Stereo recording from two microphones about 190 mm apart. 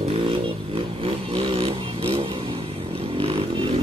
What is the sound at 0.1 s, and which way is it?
Vehicle, 25° right (ahead or behind).